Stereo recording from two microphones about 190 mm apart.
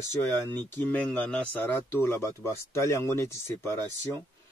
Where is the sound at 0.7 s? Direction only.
10° left (ahead or behind).